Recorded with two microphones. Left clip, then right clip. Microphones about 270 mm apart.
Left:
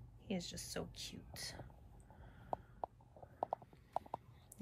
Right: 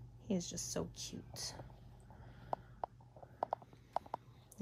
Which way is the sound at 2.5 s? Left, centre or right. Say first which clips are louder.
Right 2 dB; left.